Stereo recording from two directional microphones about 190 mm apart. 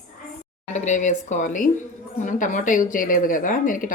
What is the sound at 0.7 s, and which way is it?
A woman's voice, 40° left (ahead or behind).